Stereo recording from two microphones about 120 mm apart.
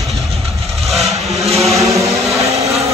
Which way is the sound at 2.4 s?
60° right (ahead or behind).